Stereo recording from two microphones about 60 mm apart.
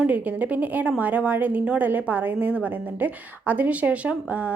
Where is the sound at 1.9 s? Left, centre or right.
Right.